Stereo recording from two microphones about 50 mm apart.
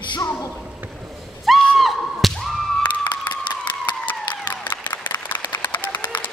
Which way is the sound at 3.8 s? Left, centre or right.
Left.